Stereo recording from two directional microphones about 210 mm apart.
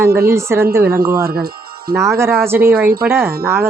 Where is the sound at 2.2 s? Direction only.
10° right (ahead or behind).